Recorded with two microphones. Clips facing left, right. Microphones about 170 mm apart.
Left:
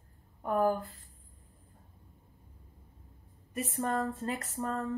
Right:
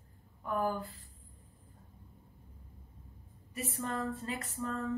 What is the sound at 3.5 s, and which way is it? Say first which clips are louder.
Speech: left 5 dB; 50° left (ahead or behind).